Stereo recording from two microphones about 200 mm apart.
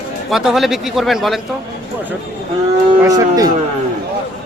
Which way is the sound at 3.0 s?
15° right (ahead or behind).